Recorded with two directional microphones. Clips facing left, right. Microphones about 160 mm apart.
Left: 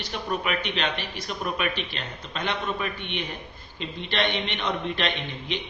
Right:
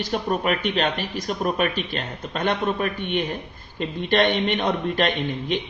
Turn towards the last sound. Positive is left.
turn(degrees=-50)  # may be behind; listen again after turning